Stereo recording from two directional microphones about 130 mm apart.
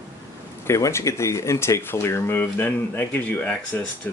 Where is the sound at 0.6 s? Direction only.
20° left (ahead or behind).